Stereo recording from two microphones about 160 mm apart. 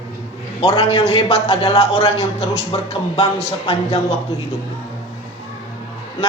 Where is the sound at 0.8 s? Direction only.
35° left (ahead or behind).